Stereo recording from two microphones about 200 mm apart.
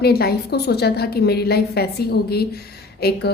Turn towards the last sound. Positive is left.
turn(degrees=50)  # may be behind; listen again after turning